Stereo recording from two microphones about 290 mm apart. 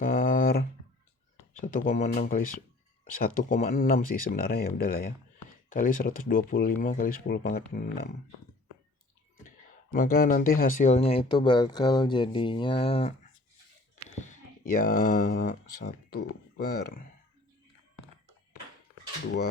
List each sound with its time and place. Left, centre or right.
0.0 s a sound: left
1.6 s speech: left
9.9 s speech: left
14.8 s speech: left